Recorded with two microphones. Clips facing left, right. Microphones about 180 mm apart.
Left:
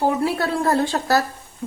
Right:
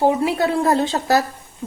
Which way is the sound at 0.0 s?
20° right (ahead or behind).